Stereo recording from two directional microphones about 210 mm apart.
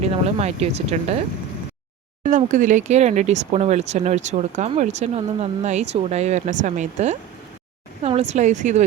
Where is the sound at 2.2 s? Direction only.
40° right (ahead or behind).